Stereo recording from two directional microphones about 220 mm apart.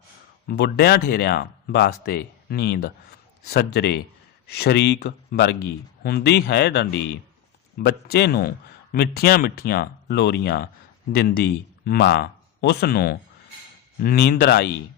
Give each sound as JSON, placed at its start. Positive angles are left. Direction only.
{"t": 0.4, "sound": "speech", "side_deg": 45}